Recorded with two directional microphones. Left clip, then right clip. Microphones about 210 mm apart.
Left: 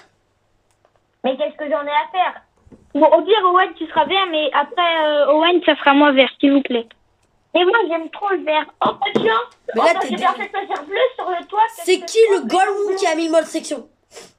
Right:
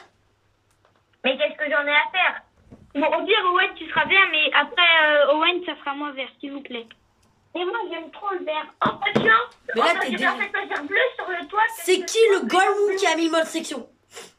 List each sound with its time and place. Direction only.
1.2 s speech: 25° left (ahead or behind)
5.5 s speech: 45° left (ahead or behind)
8.8 s speech: 30° left (ahead or behind)